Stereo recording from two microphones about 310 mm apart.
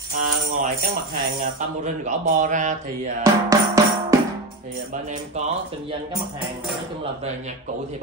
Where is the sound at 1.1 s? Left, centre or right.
Right.